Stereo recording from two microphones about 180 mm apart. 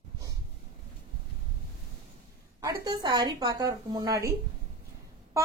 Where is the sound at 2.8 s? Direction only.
25° right (ahead or behind).